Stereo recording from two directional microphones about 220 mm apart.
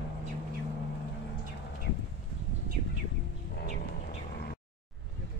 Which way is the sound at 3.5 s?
45° left (ahead or behind).